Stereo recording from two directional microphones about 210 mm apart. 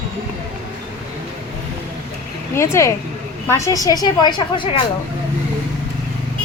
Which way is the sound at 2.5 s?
15° left (ahead or behind).